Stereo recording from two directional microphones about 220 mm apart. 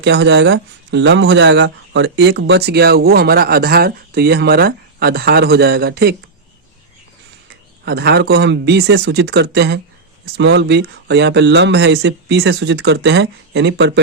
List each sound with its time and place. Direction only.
0.0 s speech: 50° right (ahead or behind)
7.9 s speech: 50° right (ahead or behind)